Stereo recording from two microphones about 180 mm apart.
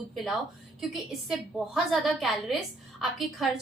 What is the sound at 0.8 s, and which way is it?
A woman's voice, centre (ahead or behind).